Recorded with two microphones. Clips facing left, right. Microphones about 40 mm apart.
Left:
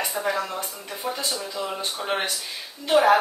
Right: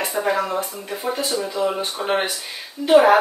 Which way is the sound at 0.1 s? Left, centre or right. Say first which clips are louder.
Right 5 dB; centre.